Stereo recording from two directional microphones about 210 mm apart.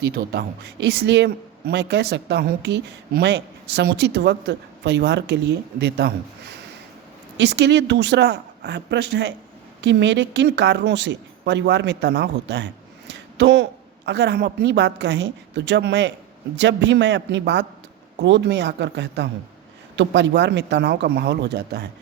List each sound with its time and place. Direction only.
0.3 s a woman's voice: 50° right (ahead or behind)
7.3 s speech: 55° right (ahead or behind)